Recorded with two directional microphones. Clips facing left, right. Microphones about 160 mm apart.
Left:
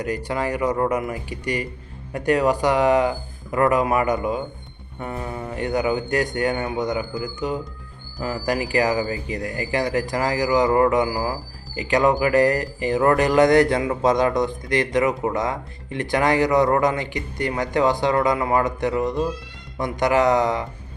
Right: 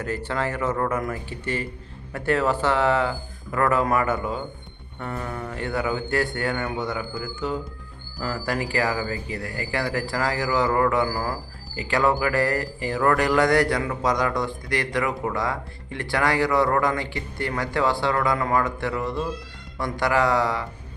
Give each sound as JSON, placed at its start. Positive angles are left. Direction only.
{"t": 0.0, "sound": "speech", "side_deg": 15}